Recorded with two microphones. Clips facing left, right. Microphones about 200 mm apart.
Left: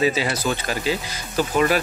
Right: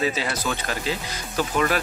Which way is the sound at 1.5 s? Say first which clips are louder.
Left 4 dB; 5° left (ahead or behind).